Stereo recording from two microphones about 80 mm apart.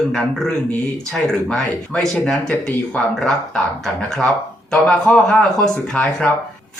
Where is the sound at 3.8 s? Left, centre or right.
Centre.